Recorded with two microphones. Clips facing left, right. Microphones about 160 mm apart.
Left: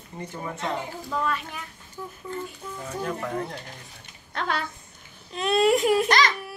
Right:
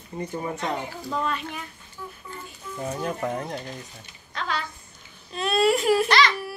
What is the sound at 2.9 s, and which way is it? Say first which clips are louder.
Speech: right 2 dB; 25° right (ahead or behind).